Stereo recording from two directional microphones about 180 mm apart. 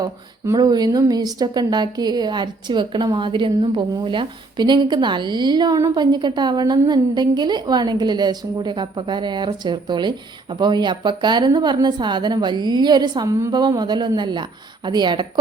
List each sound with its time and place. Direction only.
0.0 s speech: 20° right (ahead or behind)